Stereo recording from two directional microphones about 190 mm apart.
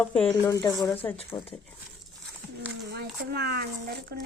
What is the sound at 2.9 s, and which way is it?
Speech, 55° right (ahead or behind).